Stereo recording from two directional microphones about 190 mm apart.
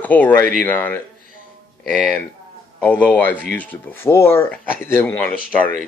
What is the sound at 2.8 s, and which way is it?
Speech, 10° left (ahead or behind).